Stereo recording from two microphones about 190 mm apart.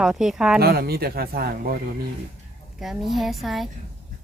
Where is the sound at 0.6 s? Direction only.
55° right (ahead or behind).